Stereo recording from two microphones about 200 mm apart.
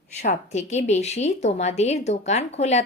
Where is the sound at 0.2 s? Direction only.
35° left (ahead or behind).